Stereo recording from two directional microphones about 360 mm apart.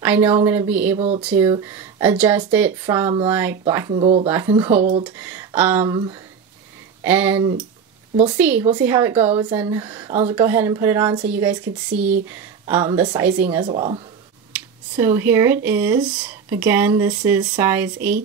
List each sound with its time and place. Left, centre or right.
0.0 s speech: centre
0.9 s speech: centre
1.2 s speech: centre
13.7 s speech: centre